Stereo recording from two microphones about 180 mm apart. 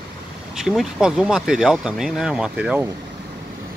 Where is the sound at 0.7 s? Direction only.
5° right (ahead or behind).